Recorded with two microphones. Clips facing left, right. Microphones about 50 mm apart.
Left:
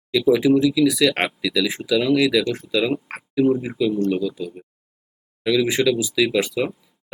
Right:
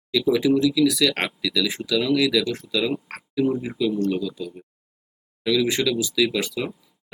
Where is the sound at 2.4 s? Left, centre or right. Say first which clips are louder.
Left 3 dB; centre.